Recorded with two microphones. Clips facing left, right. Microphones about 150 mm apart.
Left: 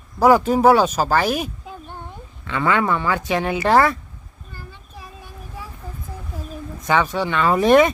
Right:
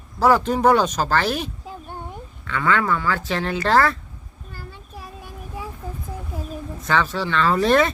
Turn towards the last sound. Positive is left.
turn(degrees=15)  # may be behind; listen again after turning